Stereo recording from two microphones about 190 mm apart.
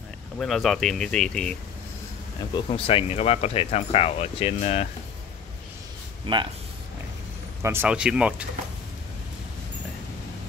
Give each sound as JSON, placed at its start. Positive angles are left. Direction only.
{"t": 0.4, "sound": "speech", "side_deg": 0}
{"t": 2.5, "sound": "speech", "side_deg": 30}
{"t": 6.2, "sound": "speech", "side_deg": -25}
{"t": 7.6, "sound": "speech", "side_deg": -10}